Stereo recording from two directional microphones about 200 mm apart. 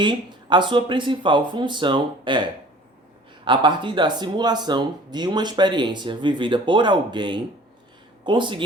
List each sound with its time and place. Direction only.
0.0 s speech: 25° right (ahead or behind)
3.4 s speech: 25° right (ahead or behind)